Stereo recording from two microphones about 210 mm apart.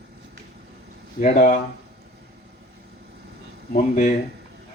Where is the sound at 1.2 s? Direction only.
40° left (ahead or behind).